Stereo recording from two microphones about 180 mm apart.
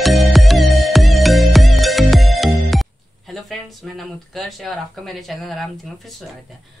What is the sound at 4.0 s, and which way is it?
Speech, centre (ahead or behind).